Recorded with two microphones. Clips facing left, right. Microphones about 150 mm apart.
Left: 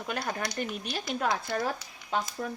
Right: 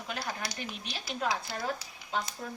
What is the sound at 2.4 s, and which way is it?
Speech, 85° left.